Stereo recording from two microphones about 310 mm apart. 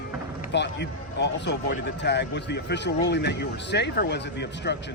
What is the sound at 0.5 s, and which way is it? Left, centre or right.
Speech, left.